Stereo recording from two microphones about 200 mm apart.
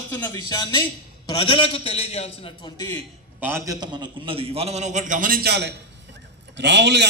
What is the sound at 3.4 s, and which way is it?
A man's voice, 15° right (ahead or behind).